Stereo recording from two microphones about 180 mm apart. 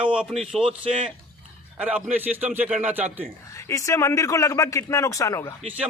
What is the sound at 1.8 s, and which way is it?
A man's voice, 5° right (ahead or behind).